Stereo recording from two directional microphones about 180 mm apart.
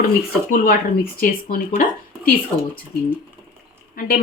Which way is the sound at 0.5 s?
50° left (ahead or behind).